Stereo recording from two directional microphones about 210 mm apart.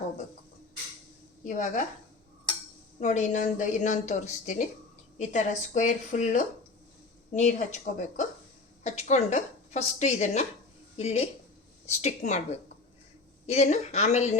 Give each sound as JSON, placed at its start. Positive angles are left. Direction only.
{"t": 1.5, "sound": "a woman's voice", "side_deg": 35}
{"t": 3.0, "sound": "a woman's voice", "side_deg": 35}